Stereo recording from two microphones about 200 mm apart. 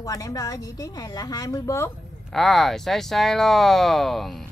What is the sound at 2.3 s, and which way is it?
Speech, centre (ahead or behind).